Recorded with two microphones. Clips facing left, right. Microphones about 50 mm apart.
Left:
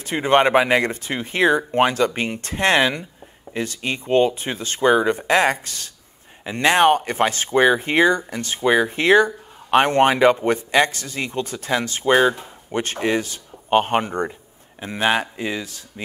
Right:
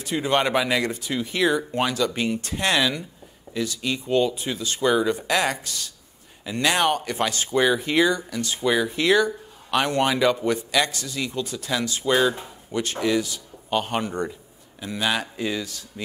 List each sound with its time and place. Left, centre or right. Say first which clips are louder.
0.0 s speech: left 6 dB; left